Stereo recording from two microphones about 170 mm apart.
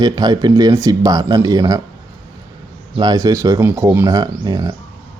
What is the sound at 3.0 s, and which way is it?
Speech, 20° right (ahead or behind).